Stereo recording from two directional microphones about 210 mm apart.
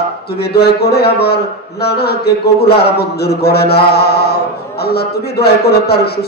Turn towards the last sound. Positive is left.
turn(degrees=50)  # may be behind; listen again after turning